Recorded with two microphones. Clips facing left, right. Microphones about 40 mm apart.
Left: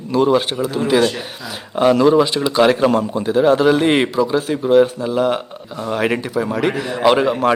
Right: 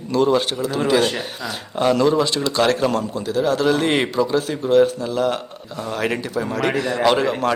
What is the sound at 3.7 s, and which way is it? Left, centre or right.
A man's voice, centre.